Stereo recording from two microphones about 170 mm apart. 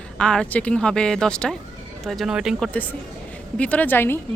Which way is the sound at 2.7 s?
10° left (ahead or behind).